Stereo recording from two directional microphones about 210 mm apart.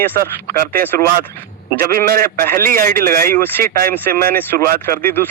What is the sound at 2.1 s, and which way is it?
Speech, 45° right (ahead or behind).